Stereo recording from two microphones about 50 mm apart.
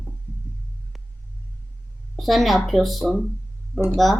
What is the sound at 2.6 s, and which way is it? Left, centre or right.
Speech, centre.